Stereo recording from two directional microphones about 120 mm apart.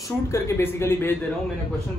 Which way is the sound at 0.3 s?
20° left (ahead or behind).